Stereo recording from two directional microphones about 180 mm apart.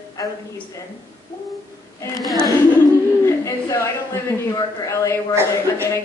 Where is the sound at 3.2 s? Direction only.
15° left (ahead or behind).